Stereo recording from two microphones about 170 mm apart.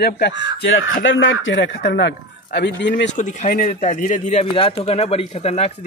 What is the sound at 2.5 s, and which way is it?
Speech, 75° left (ahead or behind).